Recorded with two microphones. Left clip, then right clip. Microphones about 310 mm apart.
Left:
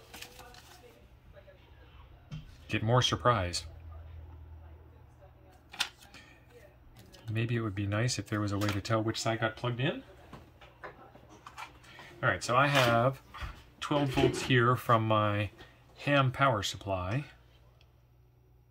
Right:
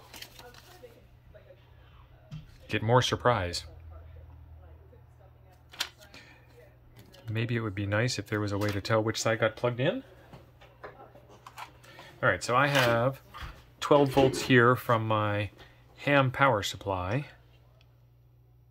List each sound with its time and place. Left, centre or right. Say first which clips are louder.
2.6 s speech: right 3 dB; centre
5.8 s music: left 1 dB; centre
7.0 s speech: right 2 dB; centre
12.2 s speech: right 2 dB; centre
13.7 s speech: right 7 dB; centre
14.9 s speech: even; centre